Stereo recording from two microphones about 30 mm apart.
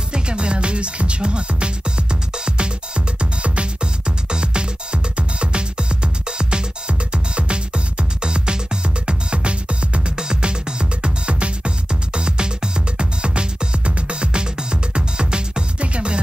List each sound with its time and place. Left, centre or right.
0.1 s music: right
3.2 s music: right
3.8 s music: right
10.1 s music: right